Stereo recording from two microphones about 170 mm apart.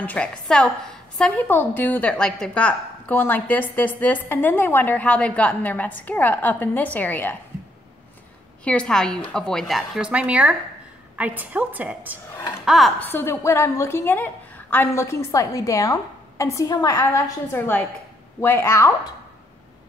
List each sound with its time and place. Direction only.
0.0 s a woman's voice: 10° left (ahead or behind)
8.6 s a woman's voice: 5° left (ahead or behind)
13.0 s a woman's voice: 15° left (ahead or behind)